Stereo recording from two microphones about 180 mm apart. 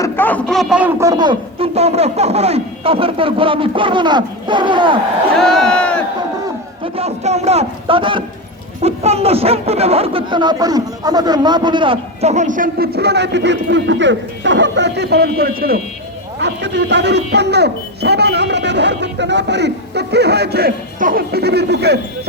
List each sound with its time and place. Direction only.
0.0 s a man's voice: 10° left (ahead or behind); by 4.9 s 25° right (ahead or behind)
5.4 s a sound: centre (ahead or behind)
6.8 s speech: 35° right (ahead or behind); by 15.8 s 55° right (ahead or behind)
16.4 s speech: 75° right (ahead or behind)